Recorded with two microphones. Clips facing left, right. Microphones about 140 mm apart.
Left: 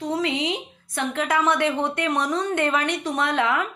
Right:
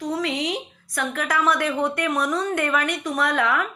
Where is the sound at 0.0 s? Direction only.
25° left (ahead or behind).